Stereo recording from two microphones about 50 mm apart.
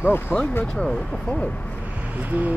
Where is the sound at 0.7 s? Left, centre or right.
Centre.